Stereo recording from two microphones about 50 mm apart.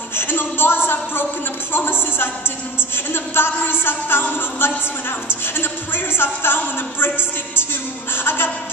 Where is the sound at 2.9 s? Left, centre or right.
Left.